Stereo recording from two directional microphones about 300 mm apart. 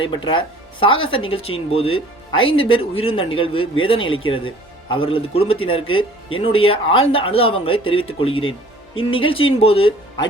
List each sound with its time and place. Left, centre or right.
0.0 s speech: centre